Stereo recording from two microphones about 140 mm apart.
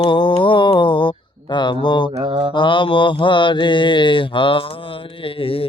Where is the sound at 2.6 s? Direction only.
35° left (ahead or behind).